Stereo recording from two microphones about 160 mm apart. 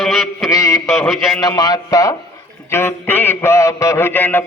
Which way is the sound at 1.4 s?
25° left (ahead or behind).